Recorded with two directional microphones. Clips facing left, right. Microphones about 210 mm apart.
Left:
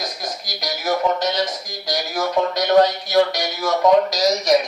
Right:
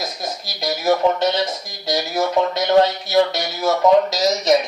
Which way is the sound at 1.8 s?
25° right (ahead or behind).